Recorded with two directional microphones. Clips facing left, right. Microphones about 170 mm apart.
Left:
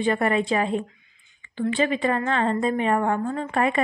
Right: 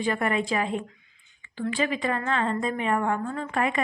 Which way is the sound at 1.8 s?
30° left (ahead or behind).